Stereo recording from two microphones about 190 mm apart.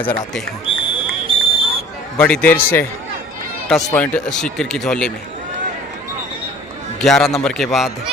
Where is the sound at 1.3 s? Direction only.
25° right (ahead or behind).